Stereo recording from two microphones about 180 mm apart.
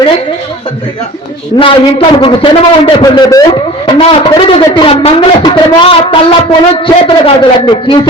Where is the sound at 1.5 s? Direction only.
30° left (ahead or behind).